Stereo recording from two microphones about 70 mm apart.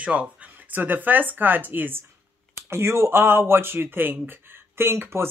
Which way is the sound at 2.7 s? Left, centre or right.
Right.